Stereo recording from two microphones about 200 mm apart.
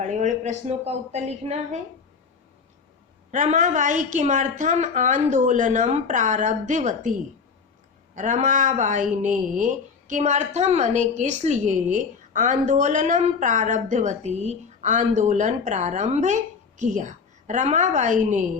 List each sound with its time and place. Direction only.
0.0 s speech: 35° right (ahead or behind)
3.3 s speech: 40° right (ahead or behind)